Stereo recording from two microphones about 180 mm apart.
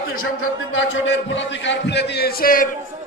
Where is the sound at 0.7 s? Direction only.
90° left; by 2.7 s 50° left (ahead or behind).